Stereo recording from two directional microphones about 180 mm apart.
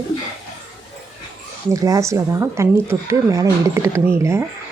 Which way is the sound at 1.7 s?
20° right (ahead or behind).